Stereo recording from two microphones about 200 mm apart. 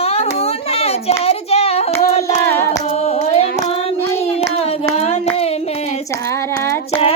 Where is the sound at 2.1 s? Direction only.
30° left (ahead or behind).